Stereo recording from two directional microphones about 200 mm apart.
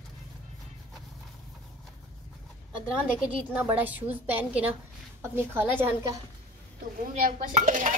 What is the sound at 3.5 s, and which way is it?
Speech, 10° right (ahead or behind).